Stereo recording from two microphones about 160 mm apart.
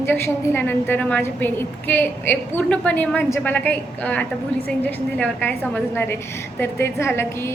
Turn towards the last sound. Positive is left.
turn(degrees=15)  # may be behind; listen again after turning